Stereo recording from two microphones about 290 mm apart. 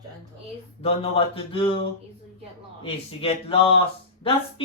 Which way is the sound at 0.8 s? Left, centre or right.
Centre.